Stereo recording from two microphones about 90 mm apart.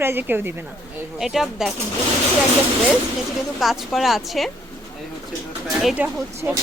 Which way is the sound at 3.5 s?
5° right (ahead or behind).